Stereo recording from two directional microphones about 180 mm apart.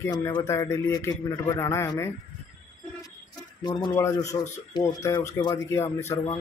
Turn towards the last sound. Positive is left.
turn(degrees=15)  # may be behind; listen again after turning